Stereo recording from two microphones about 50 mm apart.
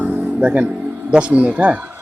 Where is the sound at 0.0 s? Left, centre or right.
Right.